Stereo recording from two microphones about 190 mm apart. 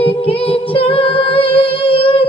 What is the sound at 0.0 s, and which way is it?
A capella, 30° left (ahead or behind).